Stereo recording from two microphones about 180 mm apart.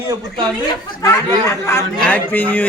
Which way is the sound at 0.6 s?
15° left (ahead or behind).